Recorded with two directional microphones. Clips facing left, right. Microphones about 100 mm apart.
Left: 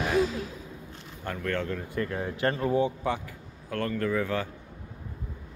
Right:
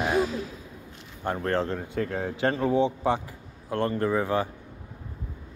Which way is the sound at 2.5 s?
30° right (ahead or behind).